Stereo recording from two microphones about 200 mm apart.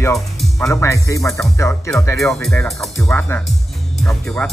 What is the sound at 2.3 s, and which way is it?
Speech, 5° left (ahead or behind).